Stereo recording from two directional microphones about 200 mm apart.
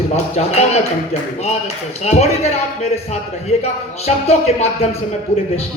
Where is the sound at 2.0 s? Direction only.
35° left (ahead or behind).